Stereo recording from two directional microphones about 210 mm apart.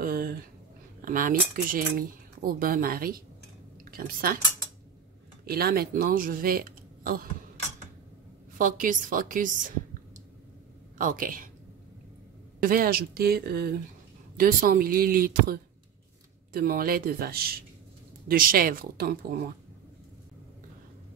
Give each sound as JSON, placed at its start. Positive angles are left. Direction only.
{"t": 0.0, "sound": "a sound", "side_deg": -45}
{"t": 1.0, "sound": "speech", "side_deg": -40}
{"t": 5.5, "sound": "speech", "side_deg": -45}
{"t": 8.5, "sound": "a woman's voice", "side_deg": -40}
{"t": 11.0, "sound": "a woman's voice", "side_deg": -40}
{"t": 12.5, "sound": "speech", "side_deg": -40}